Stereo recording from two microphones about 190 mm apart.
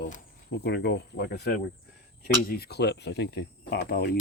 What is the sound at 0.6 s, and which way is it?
Speech, 65° left (ahead or behind).